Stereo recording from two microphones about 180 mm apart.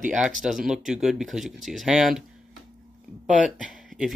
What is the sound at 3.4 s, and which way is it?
Speech, centre (ahead or behind).